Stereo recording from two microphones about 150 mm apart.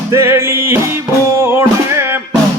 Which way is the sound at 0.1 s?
15° right (ahead or behind).